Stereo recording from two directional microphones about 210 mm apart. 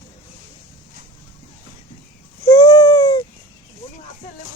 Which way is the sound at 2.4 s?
20° left (ahead or behind).